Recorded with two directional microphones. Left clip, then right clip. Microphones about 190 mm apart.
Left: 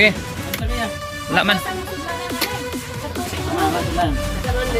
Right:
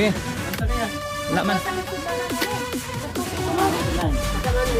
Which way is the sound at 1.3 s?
15° right (ahead or behind).